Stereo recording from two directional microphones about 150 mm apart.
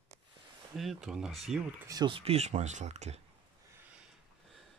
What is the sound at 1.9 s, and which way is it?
Speech, 30° right (ahead or behind).